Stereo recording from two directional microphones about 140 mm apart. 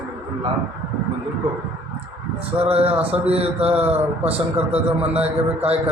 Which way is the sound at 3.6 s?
10° right (ahead or behind).